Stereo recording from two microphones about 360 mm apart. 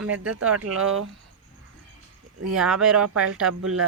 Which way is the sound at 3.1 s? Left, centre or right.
Right.